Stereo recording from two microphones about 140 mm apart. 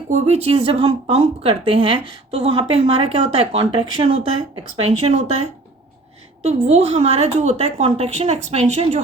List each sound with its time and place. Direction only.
0.1 s speech: 50° right (ahead or behind)